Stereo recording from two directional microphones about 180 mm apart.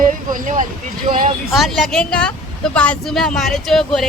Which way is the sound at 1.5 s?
Centre (ahead or behind).